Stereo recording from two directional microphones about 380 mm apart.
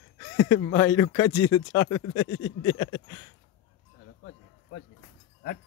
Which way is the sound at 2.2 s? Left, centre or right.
Left.